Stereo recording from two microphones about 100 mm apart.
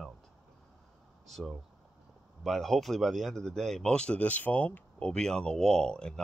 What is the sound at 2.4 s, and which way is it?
Speech, centre (ahead or behind).